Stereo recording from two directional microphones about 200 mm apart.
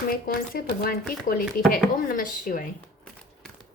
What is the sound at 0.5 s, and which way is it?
Speech, 50° left (ahead or behind).